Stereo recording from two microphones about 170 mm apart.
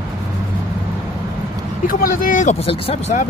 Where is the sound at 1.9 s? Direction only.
55° left (ahead or behind).